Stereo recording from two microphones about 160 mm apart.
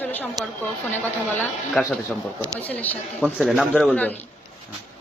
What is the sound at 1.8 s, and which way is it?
A man's voice, 5° left (ahead or behind).